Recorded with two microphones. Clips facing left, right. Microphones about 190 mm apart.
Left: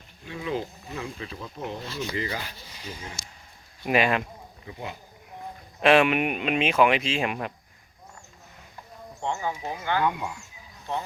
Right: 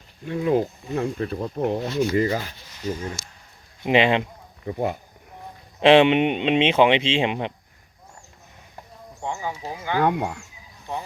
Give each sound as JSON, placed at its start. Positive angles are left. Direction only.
{"t": 0.3, "sound": "speech", "side_deg": -50}
{"t": 2.0, "sound": "speech", "side_deg": -40}
{"t": 2.8, "sound": "speech", "side_deg": 10}
{"t": 3.8, "sound": "speech", "side_deg": -25}
{"t": 4.6, "sound": "speech", "side_deg": -55}
{"t": 5.8, "sound": "speech", "side_deg": -25}
{"t": 9.2, "sound": "speech", "side_deg": -10}
{"t": 10.0, "sound": "speech", "side_deg": -65}